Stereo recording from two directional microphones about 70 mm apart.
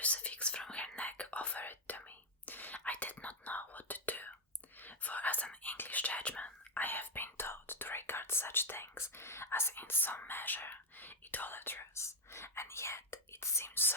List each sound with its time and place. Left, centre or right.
0.0 s whispering: centre; by 13.9 s left